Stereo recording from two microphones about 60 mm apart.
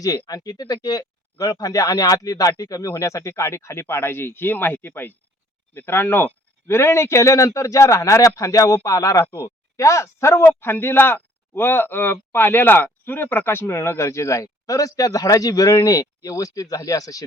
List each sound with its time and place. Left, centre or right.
0.0 s speech: left
10.4 s speech: left